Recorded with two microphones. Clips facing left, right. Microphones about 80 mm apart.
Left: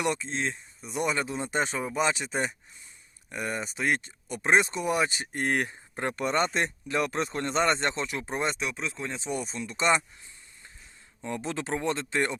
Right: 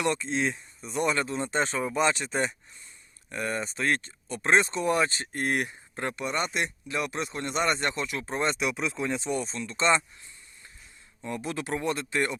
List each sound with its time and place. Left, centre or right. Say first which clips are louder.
0.1 s speech: right 2 dB; centre; by 8.2 s left
8.2 s speech: right 2 dB; centre
8.5 s speech: right 4 dB; centre
11.2 s speech: even; left